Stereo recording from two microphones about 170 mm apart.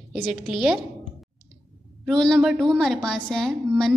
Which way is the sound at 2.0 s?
Centre (ahead or behind).